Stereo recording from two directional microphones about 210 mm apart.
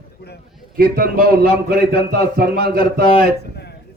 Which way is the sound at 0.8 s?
45° right (ahead or behind).